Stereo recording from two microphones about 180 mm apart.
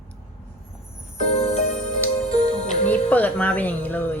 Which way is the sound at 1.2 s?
35° left (ahead or behind).